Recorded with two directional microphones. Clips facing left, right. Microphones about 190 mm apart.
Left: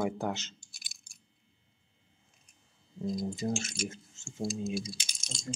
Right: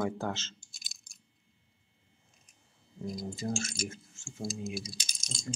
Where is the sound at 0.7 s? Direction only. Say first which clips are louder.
Even; 60° left (ahead or behind).